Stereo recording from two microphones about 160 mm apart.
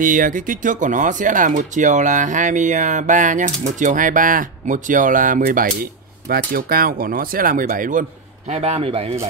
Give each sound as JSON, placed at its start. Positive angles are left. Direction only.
{"t": 0.0, "sound": "speech", "side_deg": -55}
{"t": 8.5, "sound": "speech", "side_deg": -40}